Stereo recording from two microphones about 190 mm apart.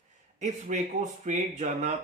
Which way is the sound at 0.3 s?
40° right (ahead or behind).